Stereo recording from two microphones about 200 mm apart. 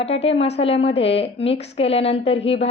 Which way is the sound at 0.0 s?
30° left (ahead or behind).